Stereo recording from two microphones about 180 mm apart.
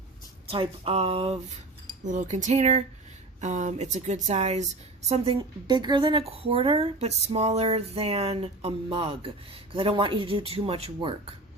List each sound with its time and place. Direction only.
0.4 s a woman's voice: 30° right (ahead or behind)
2.0 s a woman's voice: 40° right (ahead or behind)